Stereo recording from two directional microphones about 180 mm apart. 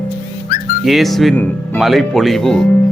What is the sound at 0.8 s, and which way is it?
Speech, centre (ahead or behind).